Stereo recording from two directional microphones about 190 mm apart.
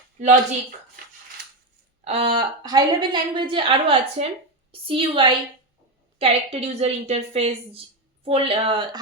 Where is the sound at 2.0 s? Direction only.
30° right (ahead or behind).